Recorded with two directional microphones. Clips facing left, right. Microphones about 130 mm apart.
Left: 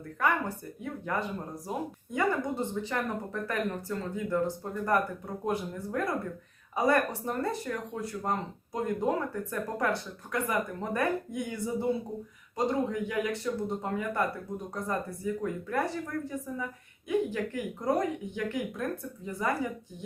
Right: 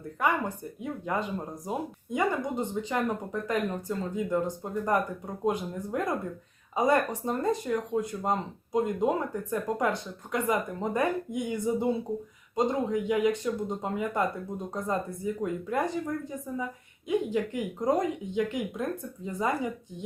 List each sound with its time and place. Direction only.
0.2 s speech: 15° right (ahead or behind)